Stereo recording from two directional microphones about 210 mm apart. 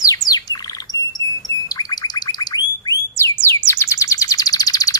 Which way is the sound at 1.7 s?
20° left (ahead or behind).